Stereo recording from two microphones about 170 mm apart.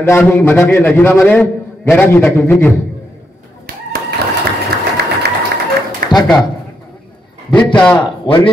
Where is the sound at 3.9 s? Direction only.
60° right (ahead or behind).